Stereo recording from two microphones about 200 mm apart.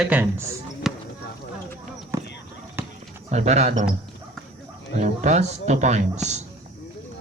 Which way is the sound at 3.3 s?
35° right (ahead or behind).